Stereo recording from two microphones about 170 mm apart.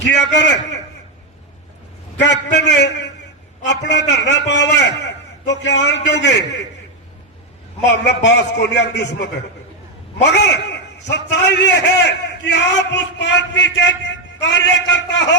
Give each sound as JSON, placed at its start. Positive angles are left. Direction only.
{"t": 0.0, "sound": "a man's voice", "side_deg": 90}
{"t": 2.2, "sound": "a man's voice", "side_deg": 90}
{"t": 8.0, "sound": "a man's voice", "side_deg": 85}